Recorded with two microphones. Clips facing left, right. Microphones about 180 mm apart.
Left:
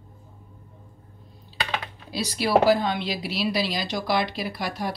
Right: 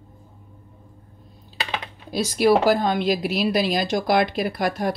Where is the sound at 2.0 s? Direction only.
50° right (ahead or behind).